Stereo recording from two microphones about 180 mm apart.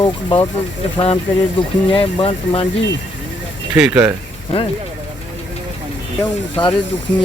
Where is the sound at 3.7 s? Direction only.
5° right (ahead or behind).